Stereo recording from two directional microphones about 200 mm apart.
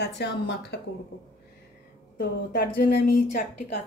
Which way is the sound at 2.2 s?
50° left (ahead or behind).